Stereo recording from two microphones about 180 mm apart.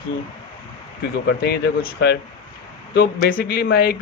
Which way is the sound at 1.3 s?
65° left (ahead or behind).